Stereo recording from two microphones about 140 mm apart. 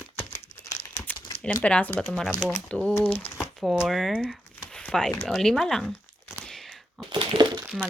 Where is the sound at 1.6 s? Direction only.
10° left (ahead or behind).